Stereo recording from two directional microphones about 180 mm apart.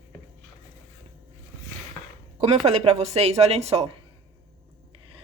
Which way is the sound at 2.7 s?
35° right (ahead or behind).